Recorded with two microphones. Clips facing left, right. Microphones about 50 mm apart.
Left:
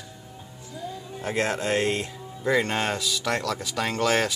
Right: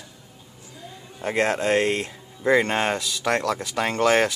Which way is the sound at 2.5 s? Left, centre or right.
Centre.